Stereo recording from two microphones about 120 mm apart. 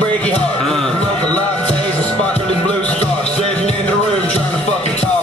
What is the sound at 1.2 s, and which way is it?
Music, 10° left (ahead or behind).